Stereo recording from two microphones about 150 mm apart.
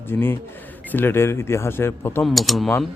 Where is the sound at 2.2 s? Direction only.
Centre (ahead or behind).